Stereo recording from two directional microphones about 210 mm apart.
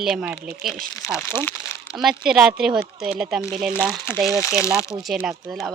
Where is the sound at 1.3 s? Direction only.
10° left (ahead or behind).